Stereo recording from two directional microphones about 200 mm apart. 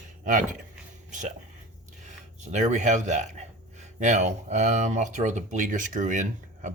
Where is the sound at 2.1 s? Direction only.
35° right (ahead or behind).